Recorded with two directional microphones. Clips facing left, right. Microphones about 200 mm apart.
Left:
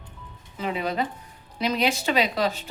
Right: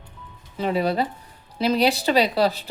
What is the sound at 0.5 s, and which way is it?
Speech, 35° right (ahead or behind).